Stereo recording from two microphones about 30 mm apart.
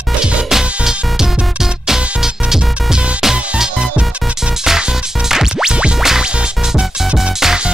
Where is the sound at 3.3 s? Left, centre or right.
Right.